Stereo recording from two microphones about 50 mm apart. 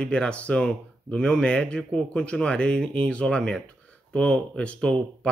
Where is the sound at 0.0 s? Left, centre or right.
Left.